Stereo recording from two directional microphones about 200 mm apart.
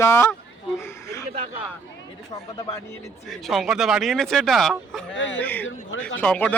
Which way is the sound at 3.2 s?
Centre (ahead or behind).